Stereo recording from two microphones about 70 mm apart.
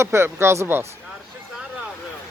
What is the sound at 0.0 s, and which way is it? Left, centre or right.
Speech, right.